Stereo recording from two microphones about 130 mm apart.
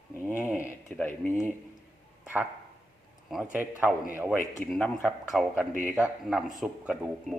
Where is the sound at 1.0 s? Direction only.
15° left (ahead or behind).